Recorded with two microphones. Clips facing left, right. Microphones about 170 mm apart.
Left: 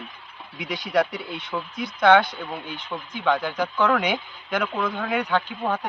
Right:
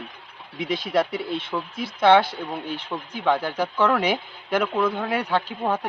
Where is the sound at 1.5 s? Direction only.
10° right (ahead or behind).